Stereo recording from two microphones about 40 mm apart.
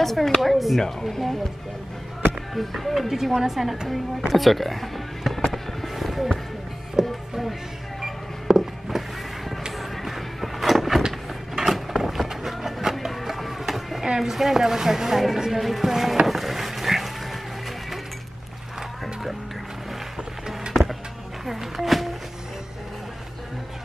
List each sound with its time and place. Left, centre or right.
0.0 s a woman's voice: centre
2.5 s a woman's voice: centre
4.3 s speech: centre
5.5 s music: centre
7.0 s music: centre
8.0 s a sound: centre
9.7 s vehicle: centre
11.0 s a sound: centre
14.3 s speech: centre
16.3 s a sound: centre
21.5 s music: centre